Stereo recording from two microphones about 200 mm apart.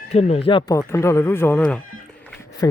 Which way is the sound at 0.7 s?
15° left (ahead or behind).